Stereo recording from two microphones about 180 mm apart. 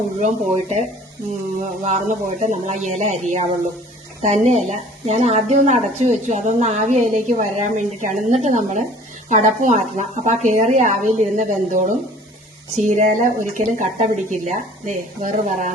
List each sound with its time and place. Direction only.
0.2 s a woman's voice: 40° right (ahead or behind)